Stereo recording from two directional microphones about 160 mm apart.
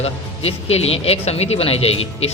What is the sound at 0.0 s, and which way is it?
Speech, 40° left (ahead or behind).